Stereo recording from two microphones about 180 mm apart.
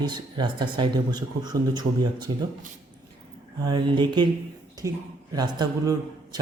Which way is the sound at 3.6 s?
25° right (ahead or behind).